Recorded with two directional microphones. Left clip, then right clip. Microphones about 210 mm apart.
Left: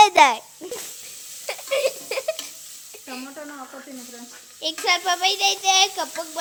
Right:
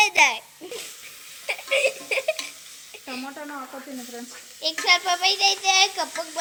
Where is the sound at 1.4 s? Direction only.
10° left (ahead or behind).